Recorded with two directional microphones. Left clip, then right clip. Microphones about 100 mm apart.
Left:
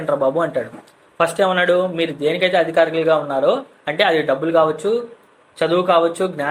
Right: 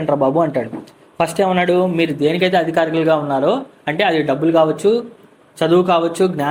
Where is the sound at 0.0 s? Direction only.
20° right (ahead or behind).